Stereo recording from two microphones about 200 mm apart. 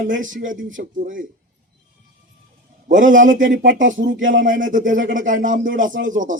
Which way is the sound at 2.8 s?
40° right (ahead or behind).